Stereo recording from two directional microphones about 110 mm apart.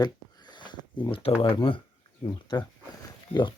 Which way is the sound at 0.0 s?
40° left (ahead or behind).